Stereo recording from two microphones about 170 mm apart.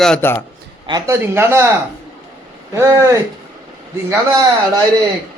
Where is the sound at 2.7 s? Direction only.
20° right (ahead or behind).